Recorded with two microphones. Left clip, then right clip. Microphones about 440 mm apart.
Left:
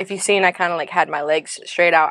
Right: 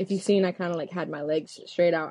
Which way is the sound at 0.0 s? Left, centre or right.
Left.